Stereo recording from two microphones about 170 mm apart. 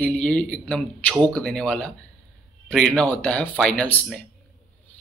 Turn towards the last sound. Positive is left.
turn(degrees=5)  # may be behind; listen again after turning